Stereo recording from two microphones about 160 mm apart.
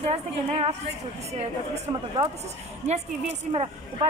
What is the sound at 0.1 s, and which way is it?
A woman's voice, 40° right (ahead or behind).